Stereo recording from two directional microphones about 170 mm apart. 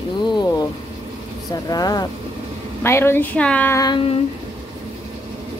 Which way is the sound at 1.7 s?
20° left (ahead or behind).